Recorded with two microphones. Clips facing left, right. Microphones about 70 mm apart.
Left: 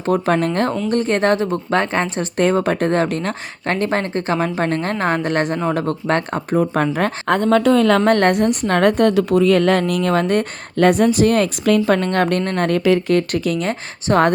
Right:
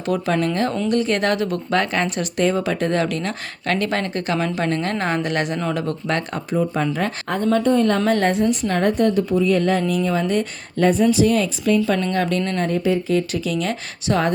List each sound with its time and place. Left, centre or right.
0.0 s speech: left
2.4 s speech: left
6.9 s a woman's voice: left
8.0 s a woman's voice: left
11.9 s speech: left
12.5 s speech: left